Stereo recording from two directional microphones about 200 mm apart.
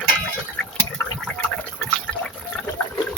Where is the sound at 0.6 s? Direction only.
5° left (ahead or behind).